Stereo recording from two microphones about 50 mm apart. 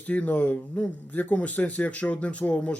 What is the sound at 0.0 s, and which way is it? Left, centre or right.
Speech, left.